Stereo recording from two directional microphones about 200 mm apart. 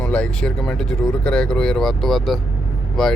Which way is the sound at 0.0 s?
5° left (ahead or behind).